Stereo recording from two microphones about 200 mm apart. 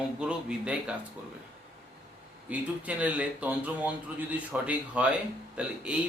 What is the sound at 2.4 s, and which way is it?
Speech, 5° right (ahead or behind).